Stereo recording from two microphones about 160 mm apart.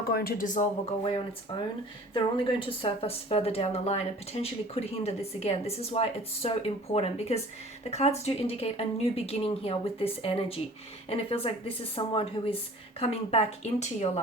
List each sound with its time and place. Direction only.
0.0 s speech: 75° left (ahead or behind); by 0.9 s 50° left (ahead or behind)
1.0 s speech: 35° left (ahead or behind)